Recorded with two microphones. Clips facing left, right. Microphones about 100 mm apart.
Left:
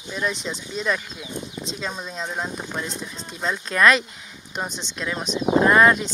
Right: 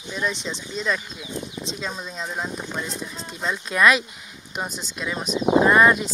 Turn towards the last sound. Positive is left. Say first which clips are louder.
# even
turn(degrees=-5)  # may be behind; listen again after turning